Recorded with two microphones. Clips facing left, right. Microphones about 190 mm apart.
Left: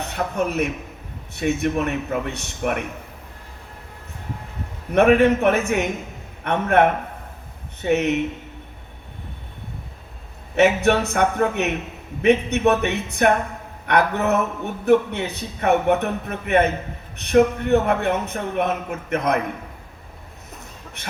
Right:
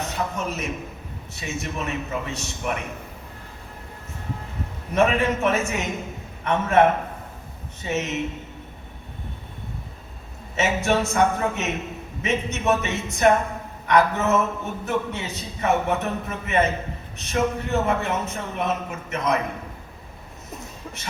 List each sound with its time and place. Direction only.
0.0 s a man's voice: 60° left (ahead or behind)
4.9 s a man's voice: 60° left (ahead or behind)
10.5 s a man's voice: 60° left (ahead or behind)
21.0 s a man's voice: 60° left (ahead or behind)